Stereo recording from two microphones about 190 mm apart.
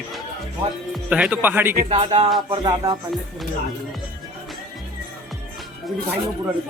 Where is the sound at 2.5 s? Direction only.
25° right (ahead or behind).